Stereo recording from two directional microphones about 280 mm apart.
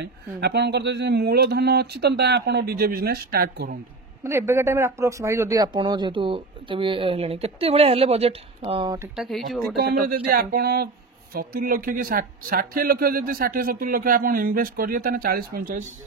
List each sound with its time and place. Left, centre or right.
0.0 s speech: right
4.2 s speech: centre
9.1 s speech: centre
9.8 s speech: right